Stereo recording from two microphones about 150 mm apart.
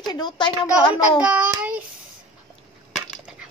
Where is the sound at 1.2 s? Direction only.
10° right (ahead or behind).